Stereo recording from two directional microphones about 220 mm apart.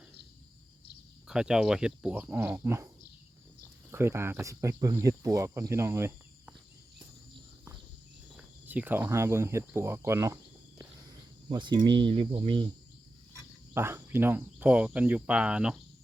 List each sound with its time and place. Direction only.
1.3 s speech: 5° right (ahead or behind)
8.4 s speech: 5° right (ahead or behind)
11.4 s speech: 20° right (ahead or behind)
13.7 s speech: 10° right (ahead or behind)